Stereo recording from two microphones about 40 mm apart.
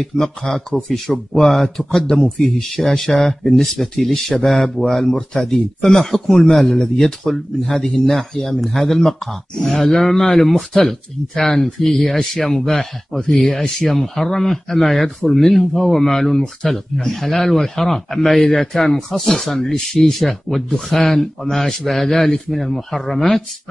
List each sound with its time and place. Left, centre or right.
0.4 s speech: centre